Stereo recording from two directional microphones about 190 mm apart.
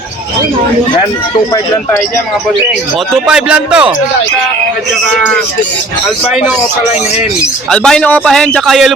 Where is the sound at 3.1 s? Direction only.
5° right (ahead or behind).